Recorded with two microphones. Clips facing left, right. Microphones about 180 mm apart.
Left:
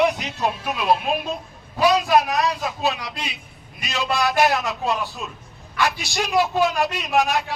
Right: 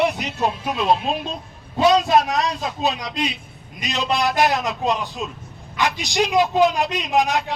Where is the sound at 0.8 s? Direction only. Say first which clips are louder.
Left 1 dB; 25° right (ahead or behind).